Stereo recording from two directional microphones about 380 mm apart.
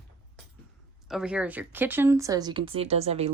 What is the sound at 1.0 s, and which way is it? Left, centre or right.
Speech, centre.